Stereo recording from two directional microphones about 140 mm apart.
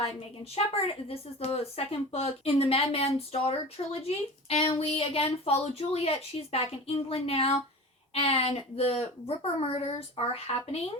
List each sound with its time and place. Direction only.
0.5 s a woman's voice: 45° left (ahead or behind)